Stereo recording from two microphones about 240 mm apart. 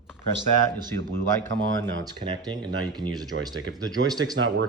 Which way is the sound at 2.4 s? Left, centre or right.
Centre.